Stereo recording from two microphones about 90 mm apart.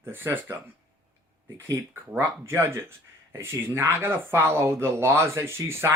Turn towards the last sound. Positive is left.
turn(degrees=-30)  # may be behind; listen again after turning